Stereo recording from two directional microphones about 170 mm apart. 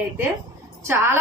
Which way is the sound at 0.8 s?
15° right (ahead or behind).